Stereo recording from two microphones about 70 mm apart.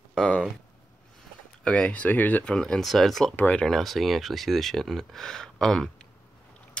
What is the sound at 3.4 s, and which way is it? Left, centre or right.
Speech, centre.